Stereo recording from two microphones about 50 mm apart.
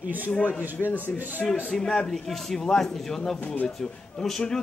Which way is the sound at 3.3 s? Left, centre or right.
Left.